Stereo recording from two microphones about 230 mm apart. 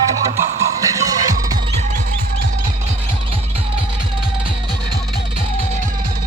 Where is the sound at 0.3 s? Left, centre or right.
Centre.